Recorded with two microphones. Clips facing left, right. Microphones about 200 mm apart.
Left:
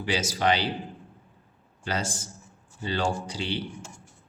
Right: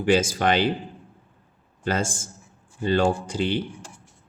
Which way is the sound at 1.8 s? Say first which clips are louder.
Right 5 dB; 50° right (ahead or behind).